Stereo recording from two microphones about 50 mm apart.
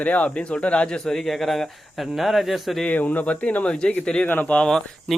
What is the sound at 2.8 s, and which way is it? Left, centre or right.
Speech, left.